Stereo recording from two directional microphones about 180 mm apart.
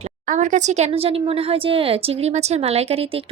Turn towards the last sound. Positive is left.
turn(degrees=-30)  # may be behind; listen again after turning